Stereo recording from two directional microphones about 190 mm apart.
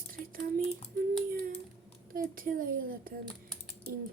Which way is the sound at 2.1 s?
50° right (ahead or behind).